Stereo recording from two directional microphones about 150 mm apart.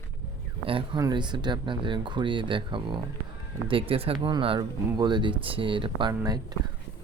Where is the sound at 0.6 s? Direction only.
35° right (ahead or behind).